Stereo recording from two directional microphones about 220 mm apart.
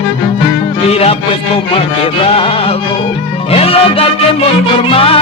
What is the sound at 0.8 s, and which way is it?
Music, 25° left (ahead or behind).